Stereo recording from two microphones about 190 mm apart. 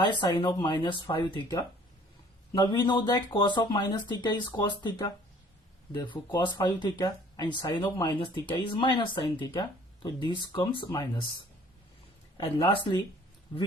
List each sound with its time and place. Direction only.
0.0 s speech: 25° left (ahead or behind)
12.4 s speech: 25° left (ahead or behind)